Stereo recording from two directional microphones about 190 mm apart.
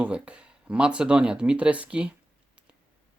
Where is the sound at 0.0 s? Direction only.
5° right (ahead or behind).